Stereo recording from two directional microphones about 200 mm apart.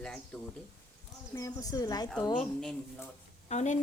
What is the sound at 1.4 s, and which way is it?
Speech, 15° left (ahead or behind).